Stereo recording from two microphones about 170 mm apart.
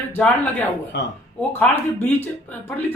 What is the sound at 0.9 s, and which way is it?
Speech, 90° left.